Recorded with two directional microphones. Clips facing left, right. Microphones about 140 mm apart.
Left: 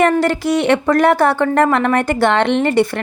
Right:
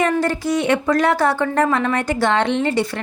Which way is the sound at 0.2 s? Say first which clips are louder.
Left 4 dB; 75° left (ahead or behind).